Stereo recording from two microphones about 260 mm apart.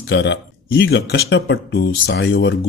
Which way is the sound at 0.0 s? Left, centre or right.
Left.